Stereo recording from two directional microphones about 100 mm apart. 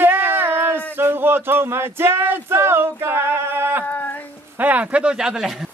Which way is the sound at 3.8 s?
20° left (ahead or behind).